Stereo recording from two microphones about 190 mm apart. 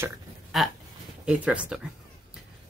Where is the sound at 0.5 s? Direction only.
Centre (ahead or behind).